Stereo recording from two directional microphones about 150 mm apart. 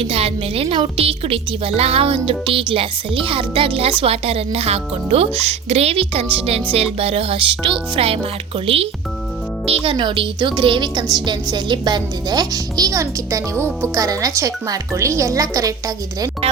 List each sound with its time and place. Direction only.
0.0 s a woman's voice: 40° right (ahead or behind); by 15.7 s 20° right (ahead or behind)